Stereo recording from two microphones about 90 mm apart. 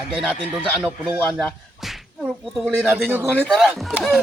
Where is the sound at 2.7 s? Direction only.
20° right (ahead or behind).